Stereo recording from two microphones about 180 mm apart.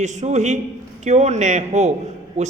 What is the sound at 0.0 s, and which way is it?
A man's voice, 40° right (ahead or behind).